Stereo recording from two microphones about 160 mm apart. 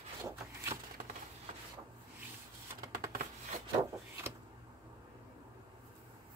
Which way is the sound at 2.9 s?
65° right (ahead or behind).